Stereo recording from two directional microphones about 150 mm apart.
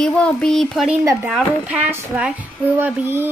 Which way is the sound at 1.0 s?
20° right (ahead or behind).